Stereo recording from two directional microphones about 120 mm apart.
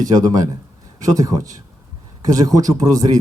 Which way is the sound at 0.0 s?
30° right (ahead or behind).